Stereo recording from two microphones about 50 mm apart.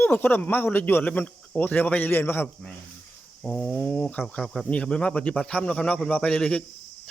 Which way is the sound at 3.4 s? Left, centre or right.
Left.